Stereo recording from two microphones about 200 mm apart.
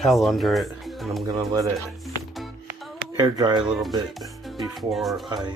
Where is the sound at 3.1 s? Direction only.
20° right (ahead or behind).